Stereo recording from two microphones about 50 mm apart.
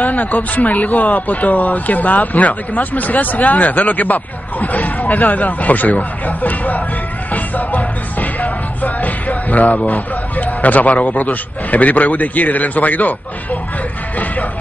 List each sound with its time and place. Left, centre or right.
0.0 s speech: left
7.3 s music: left